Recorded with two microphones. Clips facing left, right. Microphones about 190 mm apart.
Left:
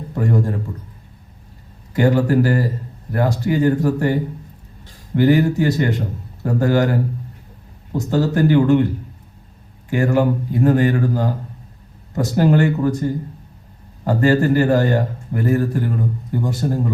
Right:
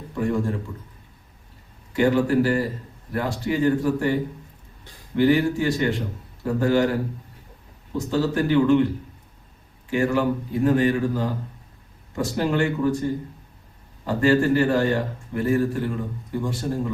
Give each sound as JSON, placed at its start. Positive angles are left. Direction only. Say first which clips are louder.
{"t": 0.1, "sound": "a man's voice", "louder": "left 3 dB", "side_deg": 40}
{"t": 1.9, "sound": "a man's voice", "louder": "left 3 dB", "side_deg": 40}
{"t": 7.9, "sound": "a man's voice", "louder": "left 4 dB", "side_deg": 45}
{"t": 9.9, "sound": "a man's voice", "louder": "left 4 dB", "side_deg": 45}